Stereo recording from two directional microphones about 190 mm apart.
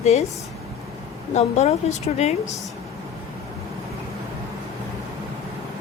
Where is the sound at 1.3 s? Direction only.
35° left (ahead or behind).